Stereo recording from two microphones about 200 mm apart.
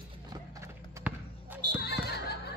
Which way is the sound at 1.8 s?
55° left (ahead or behind).